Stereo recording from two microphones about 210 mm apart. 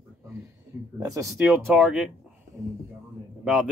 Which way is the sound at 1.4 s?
5° right (ahead or behind).